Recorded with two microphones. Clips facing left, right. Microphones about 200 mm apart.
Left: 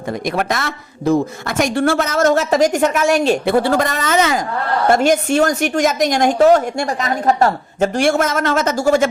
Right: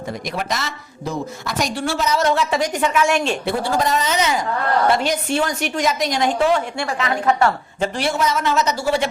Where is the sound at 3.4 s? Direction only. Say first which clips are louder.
Left 5 dB; 65° left (ahead or behind).